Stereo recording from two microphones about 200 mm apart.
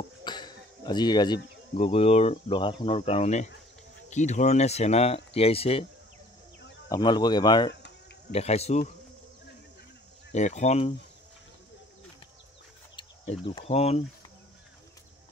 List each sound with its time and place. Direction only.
0.2 s speech: 20° left (ahead or behind)
6.9 s speech: 20° left (ahead or behind)
8.3 s speech: 30° left (ahead or behind)
10.3 s speech: 35° left (ahead or behind)
12.9 s speech: 25° left (ahead or behind)